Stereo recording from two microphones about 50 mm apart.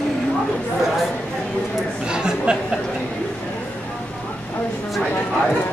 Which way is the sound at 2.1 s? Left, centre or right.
Centre.